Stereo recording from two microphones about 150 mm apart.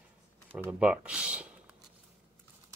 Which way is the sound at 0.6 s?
10° right (ahead or behind).